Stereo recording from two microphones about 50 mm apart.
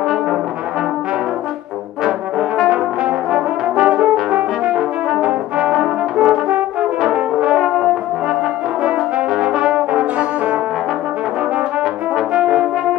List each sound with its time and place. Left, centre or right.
2.7 s brass instrument: centre
7.6 s brass instrument: centre
9.6 s brass instrument: centre
12.3 s brass instrument: centre